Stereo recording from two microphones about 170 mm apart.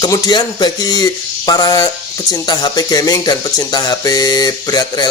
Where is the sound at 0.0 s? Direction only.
25° left (ahead or behind).